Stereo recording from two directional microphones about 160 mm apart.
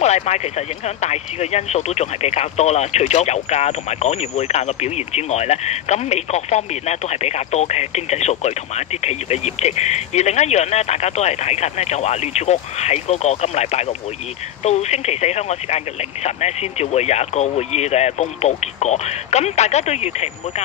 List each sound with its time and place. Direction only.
0.0 s speech: 45° left (ahead or behind)